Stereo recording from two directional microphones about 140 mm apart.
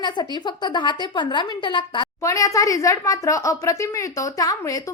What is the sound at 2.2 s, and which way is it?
Speech, 25° left (ahead or behind).